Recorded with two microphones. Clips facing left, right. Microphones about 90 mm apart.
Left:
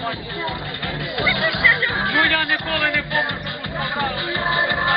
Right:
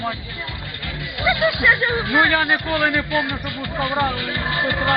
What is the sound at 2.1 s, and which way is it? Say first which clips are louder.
Speech: right 4 dB; 15° right (ahead or behind).